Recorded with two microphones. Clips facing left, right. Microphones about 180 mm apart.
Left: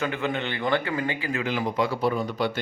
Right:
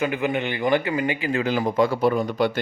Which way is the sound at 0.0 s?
15° right (ahead or behind).